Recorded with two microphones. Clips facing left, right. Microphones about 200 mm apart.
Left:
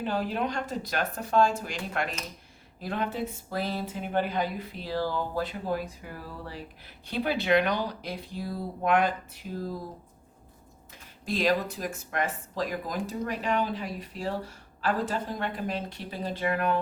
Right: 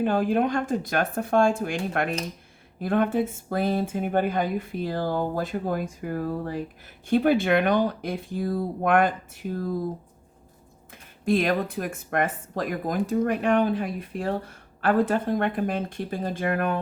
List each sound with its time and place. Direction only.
0.0 s speech: 50° right (ahead or behind)
11.3 s speech: 55° right (ahead or behind)